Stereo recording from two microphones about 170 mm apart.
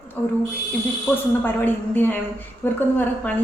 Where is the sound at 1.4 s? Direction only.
10° left (ahead or behind).